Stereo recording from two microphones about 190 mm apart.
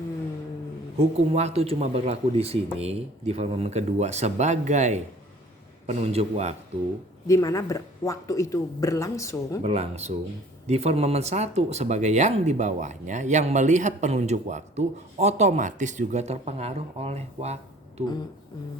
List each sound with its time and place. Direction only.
0.9 s speech: 35° right (ahead or behind)
7.3 s speech: 15° left (ahead or behind)
9.6 s speech: 35° right (ahead or behind)